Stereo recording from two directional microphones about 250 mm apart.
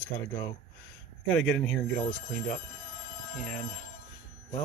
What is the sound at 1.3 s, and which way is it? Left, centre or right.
Speech, centre.